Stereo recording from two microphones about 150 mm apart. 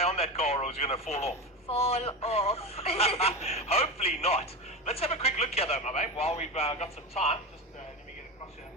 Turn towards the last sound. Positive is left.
turn(degrees=40)  # may be behind; listen again after turning